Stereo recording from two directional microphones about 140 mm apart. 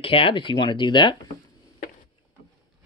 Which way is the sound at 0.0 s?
40° left (ahead or behind).